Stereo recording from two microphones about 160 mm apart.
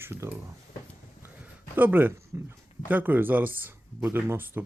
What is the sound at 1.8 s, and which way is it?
Speech, 10° right (ahead or behind).